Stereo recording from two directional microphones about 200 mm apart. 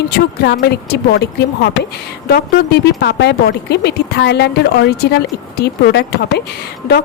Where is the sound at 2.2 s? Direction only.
55° left (ahead or behind).